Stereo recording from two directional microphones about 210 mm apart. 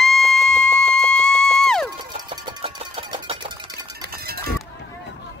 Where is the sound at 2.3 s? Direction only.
25° right (ahead or behind).